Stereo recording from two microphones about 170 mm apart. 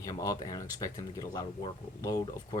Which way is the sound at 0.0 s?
20° left (ahead or behind).